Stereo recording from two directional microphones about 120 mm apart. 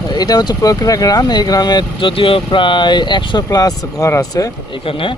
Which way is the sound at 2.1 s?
50° left (ahead or behind).